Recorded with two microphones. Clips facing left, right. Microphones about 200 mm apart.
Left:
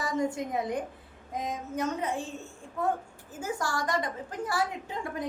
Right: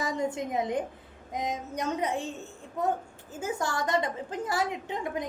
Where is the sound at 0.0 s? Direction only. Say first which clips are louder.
Even; 20° right (ahead or behind).